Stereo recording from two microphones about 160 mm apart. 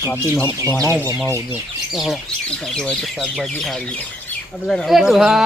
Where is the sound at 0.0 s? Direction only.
15° left (ahead or behind).